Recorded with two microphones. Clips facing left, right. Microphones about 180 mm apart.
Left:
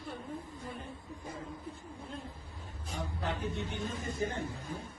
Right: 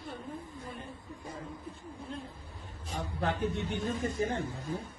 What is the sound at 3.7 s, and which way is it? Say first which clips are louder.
Speech: right 5 dB; 70° right (ahead or behind).